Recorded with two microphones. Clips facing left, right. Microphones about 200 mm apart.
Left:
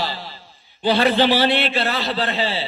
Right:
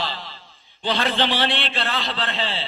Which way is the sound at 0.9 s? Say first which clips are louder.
Left 6 dB; 50° left (ahead or behind).